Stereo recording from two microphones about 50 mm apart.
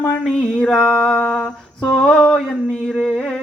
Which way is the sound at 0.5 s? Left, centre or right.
Centre.